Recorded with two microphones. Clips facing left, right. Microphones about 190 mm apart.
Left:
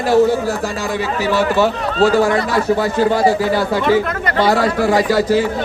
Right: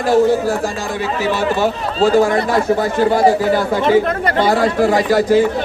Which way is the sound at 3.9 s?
25° right (ahead or behind).